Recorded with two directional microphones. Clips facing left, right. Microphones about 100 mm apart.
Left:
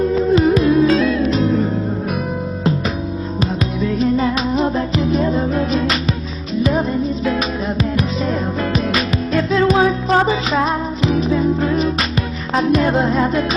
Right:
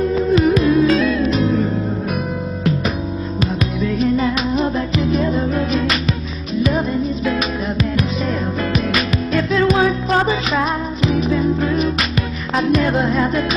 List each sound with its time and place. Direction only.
0.3 s music: 30° left (ahead or behind)
4.2 s music: 30° left (ahead or behind)
7.9 s music: 30° left (ahead or behind)